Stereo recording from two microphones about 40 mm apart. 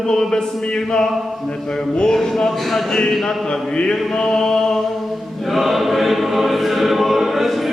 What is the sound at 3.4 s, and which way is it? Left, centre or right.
Speech, centre.